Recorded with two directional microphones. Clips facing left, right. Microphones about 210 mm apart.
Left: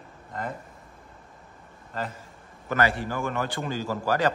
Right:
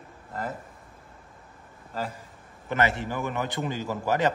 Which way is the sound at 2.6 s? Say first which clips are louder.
Left 1 dB; 25° right (ahead or behind).